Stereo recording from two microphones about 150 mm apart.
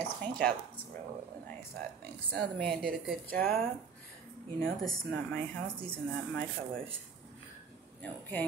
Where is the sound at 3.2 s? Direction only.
75° right (ahead or behind).